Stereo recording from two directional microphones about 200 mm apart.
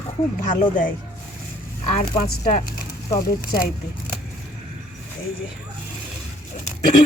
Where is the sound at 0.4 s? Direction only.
40° left (ahead or behind).